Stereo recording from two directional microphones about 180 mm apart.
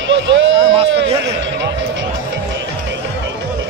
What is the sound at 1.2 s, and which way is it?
Speech, 85° right.